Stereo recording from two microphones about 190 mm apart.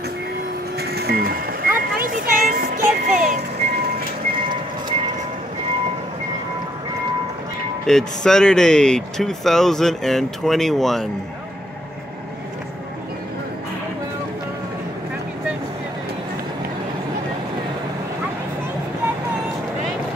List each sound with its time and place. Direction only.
0.7 s music: 55° right (ahead or behind)
7.8 s speech: 5° left (ahead or behind)